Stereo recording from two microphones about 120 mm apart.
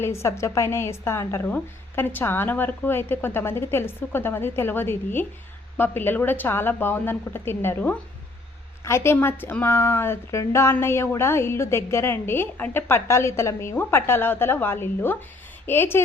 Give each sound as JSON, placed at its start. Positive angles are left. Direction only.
{"t": 0.0, "sound": "a woman's voice", "side_deg": 20}